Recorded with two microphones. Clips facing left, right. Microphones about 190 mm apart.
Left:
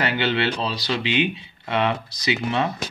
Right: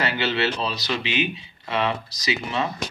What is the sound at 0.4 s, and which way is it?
Speech, 25° left (ahead or behind).